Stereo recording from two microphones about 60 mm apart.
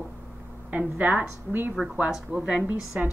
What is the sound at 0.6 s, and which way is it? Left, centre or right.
A woman's voice, right.